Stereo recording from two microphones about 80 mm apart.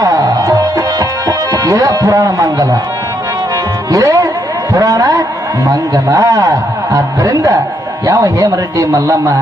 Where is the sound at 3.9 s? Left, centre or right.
Right.